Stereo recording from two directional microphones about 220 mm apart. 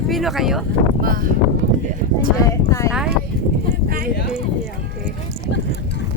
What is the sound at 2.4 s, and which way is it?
Speech, 15° left (ahead or behind).